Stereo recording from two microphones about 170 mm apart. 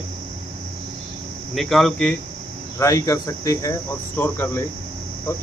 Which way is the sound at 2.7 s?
20° left (ahead or behind).